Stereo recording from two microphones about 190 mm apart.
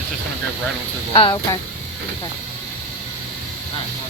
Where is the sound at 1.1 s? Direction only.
25° left (ahead or behind).